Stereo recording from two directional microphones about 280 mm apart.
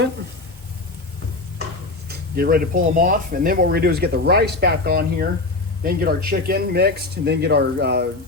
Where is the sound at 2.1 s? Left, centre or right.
Right.